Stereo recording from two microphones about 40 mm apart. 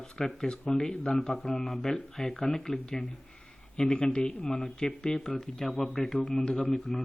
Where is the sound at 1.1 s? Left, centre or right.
Centre.